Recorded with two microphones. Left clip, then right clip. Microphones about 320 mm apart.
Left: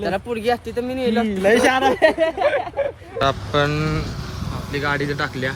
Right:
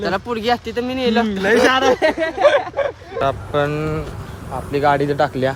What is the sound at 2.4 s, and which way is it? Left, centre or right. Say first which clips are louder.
Speech: right 5 dB; right.